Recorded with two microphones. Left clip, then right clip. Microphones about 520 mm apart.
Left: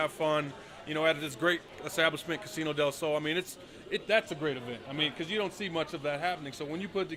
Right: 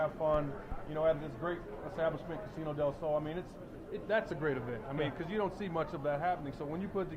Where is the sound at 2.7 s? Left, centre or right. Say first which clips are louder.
Left 4 dB; left.